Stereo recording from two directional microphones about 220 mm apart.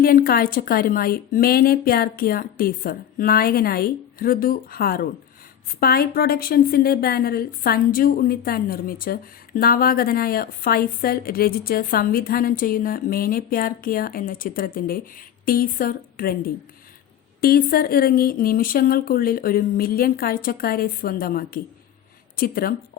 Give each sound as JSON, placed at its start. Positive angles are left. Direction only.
{"t": 0.0, "sound": "a woman's voice", "side_deg": 40}
{"t": 17.4, "sound": "a woman's voice", "side_deg": 40}